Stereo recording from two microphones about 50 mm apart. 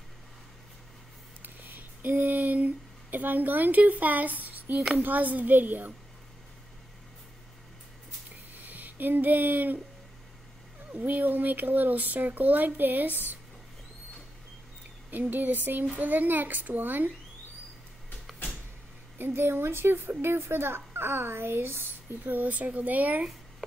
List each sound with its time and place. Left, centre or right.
1.4 s a sound: right
4.9 s speech: right
8.6 s speech: right
10.9 s speech: right
15.0 s speech: right
19.1 s speech: right